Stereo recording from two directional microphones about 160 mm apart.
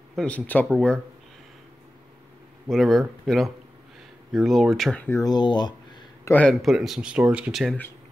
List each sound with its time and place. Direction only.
0.1 s speech: 5° left (ahead or behind)
0.7 s speech: centre (ahead or behind)
2.7 s speech: centre (ahead or behind)
5.2 s speech: 25° left (ahead or behind)
6.2 s speech: 10° left (ahead or behind)